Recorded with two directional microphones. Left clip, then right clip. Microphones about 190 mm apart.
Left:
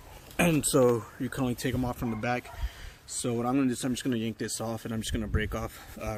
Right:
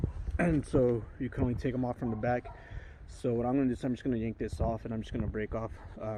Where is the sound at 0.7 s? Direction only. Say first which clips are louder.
Left 5 dB; 15° left (ahead or behind).